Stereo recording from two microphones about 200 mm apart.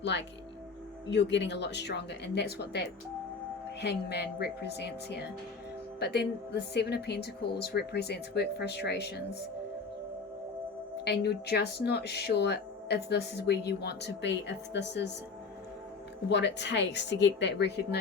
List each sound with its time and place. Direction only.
0.0 s speech: 60° left (ahead or behind)
11.0 s speech: 55° left (ahead or behind)
16.3 s speech: 60° left (ahead or behind)